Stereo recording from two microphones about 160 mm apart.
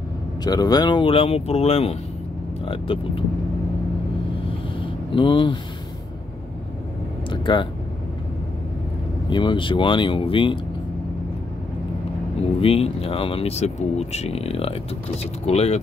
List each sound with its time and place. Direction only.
0.4 s speech: 25° left (ahead or behind)
4.7 s a sound: 30° left (ahead or behind)
7.2 s speech: 30° left (ahead or behind)
9.3 s speech: 30° left (ahead or behind)
12.5 s speech: 40° left (ahead or behind)